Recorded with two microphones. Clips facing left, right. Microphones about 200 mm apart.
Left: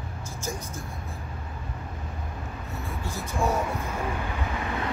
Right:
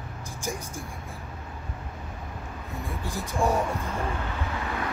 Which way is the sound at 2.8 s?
15° right (ahead or behind).